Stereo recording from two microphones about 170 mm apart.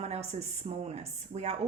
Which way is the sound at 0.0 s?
40° right (ahead or behind).